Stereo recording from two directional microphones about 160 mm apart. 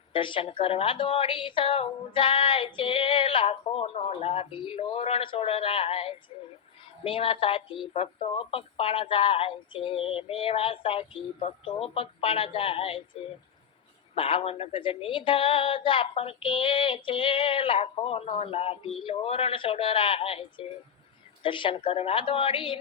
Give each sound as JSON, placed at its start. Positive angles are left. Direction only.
{"t": 0.1, "sound": "a woman's voice", "side_deg": 30}
{"t": 14.2, "sound": "a woman's voice", "side_deg": 35}